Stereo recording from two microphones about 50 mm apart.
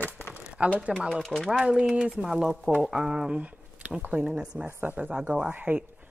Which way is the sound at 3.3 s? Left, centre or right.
Right.